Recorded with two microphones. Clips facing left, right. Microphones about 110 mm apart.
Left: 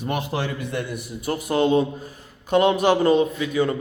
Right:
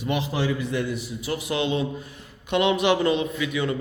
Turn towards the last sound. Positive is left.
turn(degrees=40)  # may be behind; listen again after turning